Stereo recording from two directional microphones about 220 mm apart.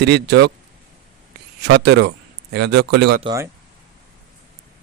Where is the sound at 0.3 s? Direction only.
50° right (ahead or behind).